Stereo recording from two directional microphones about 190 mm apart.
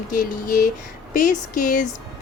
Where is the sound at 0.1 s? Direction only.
45° left (ahead or behind).